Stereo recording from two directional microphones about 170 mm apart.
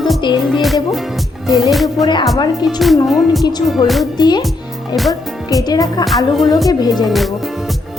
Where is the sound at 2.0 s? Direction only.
25° left (ahead or behind).